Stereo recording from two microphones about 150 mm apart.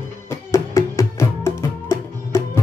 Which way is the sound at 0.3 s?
20° left (ahead or behind).